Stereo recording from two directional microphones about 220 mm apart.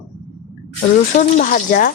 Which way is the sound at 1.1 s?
35° left (ahead or behind).